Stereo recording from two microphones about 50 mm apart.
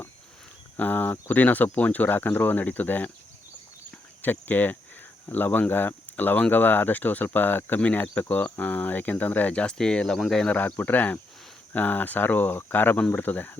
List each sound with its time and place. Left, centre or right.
0.8 s speech: left
4.2 s speech: left
7.8 s speech: left
10.2 s speech: centre
10.4 s speech: left